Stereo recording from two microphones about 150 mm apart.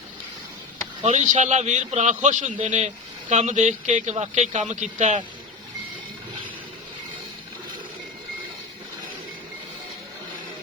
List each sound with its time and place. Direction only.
1.0 s a man's voice: 50° right (ahead or behind)